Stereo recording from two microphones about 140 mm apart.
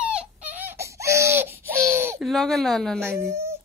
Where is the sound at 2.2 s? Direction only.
Centre (ahead or behind).